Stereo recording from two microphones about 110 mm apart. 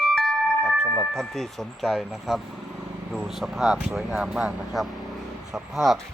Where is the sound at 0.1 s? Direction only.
5° left (ahead or behind).